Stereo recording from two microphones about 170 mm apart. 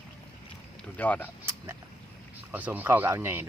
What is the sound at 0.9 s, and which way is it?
Speech, 10° left (ahead or behind).